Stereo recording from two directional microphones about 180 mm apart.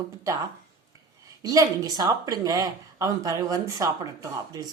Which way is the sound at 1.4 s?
20° right (ahead or behind).